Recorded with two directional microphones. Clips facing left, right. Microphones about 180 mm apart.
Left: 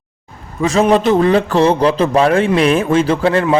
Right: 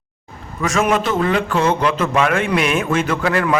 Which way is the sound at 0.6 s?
30° left (ahead or behind).